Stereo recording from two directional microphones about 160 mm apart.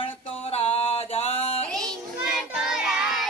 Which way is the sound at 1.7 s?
Centre (ahead or behind).